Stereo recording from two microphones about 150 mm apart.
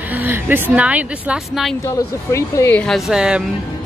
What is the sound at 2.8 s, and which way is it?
Speech, centre (ahead or behind).